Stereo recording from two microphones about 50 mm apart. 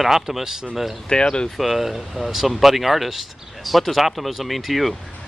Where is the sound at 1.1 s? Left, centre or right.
Centre.